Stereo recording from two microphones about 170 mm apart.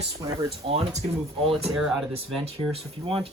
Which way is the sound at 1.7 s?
5° right (ahead or behind).